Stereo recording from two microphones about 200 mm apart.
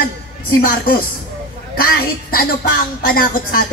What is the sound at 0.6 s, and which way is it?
Speech, 50° left (ahead or behind).